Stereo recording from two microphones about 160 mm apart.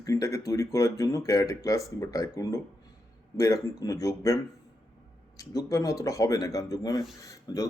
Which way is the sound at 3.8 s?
20° left (ahead or behind).